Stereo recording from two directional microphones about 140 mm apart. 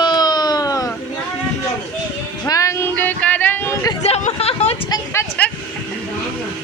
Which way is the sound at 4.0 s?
50° left (ahead or behind).